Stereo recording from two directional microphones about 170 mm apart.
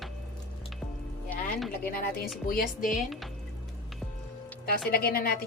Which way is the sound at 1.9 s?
65° left (ahead or behind).